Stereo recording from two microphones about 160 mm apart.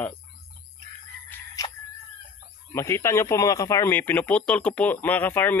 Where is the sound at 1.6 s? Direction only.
30° left (ahead or behind).